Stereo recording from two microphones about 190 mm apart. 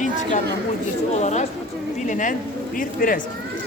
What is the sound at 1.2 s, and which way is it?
Speech, 35° left (ahead or behind).